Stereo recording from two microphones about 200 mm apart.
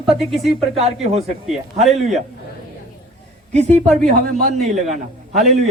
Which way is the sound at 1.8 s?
Centre (ahead or behind).